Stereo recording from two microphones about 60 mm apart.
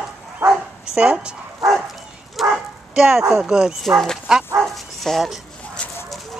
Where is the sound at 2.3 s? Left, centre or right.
Centre.